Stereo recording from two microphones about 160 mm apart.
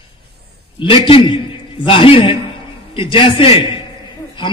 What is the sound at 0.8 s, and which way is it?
A man's voice, 30° left (ahead or behind).